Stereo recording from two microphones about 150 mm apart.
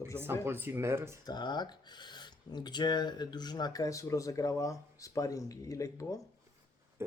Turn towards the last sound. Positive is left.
turn(degrees=20)  # may be behind; listen again after turning